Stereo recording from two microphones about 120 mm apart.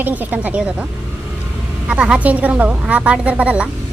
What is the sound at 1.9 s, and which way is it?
A woman's voice, 10° right (ahead or behind).